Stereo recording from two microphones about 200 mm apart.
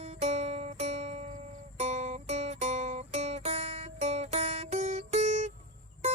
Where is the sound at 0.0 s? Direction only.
30° right (ahead or behind).